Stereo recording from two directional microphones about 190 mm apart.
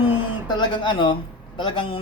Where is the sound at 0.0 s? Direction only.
25° left (ahead or behind).